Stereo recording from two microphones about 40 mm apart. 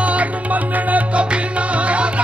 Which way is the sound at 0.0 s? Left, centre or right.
Right.